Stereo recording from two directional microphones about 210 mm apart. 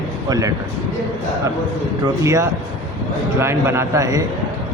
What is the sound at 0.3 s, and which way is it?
Speech, 15° right (ahead or behind).